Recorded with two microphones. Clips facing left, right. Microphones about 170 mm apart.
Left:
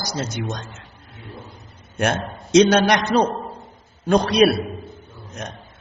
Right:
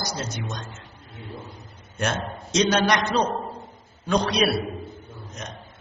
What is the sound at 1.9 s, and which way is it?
A man's voice, 55° left (ahead or behind).